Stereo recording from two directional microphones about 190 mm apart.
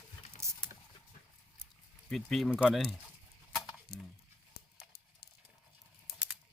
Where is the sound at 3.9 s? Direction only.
60° left (ahead or behind).